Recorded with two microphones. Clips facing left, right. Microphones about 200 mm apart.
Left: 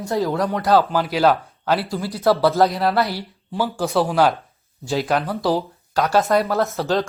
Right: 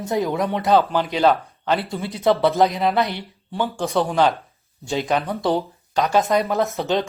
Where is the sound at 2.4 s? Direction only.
15° right (ahead or behind).